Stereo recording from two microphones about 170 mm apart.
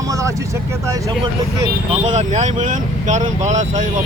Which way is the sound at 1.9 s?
40° right (ahead or behind).